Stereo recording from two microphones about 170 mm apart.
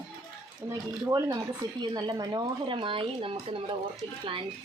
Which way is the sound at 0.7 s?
20° right (ahead or behind).